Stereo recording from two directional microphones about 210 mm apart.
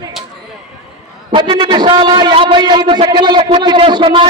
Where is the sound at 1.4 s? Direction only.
25° right (ahead or behind).